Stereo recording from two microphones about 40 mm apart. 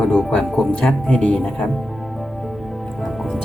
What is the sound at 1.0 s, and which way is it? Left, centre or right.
Speech, left.